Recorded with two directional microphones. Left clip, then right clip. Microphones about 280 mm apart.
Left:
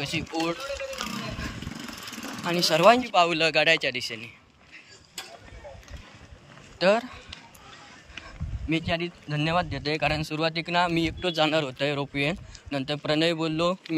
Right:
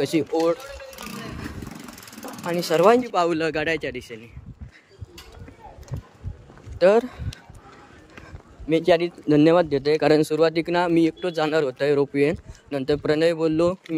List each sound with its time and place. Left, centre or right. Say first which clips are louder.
0.0 s speech: right 8 dB; right
2.4 s speech: right 1 dB; centre
6.8 s speech: right 5 dB; centre